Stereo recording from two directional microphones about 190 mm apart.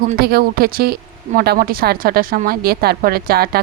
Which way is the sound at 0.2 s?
55° right (ahead or behind).